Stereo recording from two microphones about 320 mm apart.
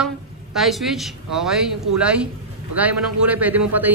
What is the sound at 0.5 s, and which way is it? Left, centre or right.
Speech, centre.